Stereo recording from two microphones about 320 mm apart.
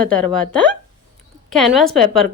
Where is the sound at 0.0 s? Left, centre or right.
Centre.